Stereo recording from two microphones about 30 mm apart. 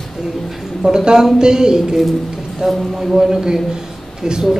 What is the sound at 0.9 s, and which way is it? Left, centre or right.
Speech, right.